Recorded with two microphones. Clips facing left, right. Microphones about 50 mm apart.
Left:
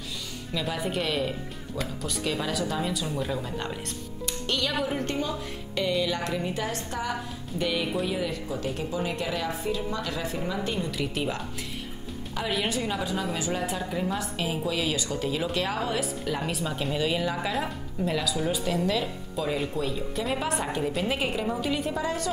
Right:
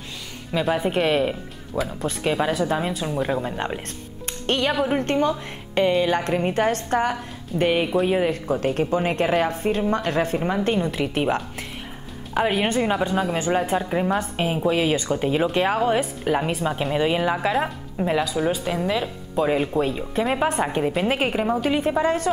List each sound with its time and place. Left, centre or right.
0.7 s a woman's voice: right
18.6 s speech: centre; by 22.3 s right